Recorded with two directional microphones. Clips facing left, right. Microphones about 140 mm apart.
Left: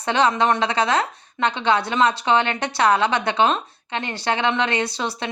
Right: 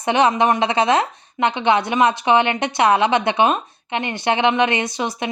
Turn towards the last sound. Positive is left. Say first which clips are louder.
# right 2 dB
turn(degrees=-15)  # may be behind; listen again after turning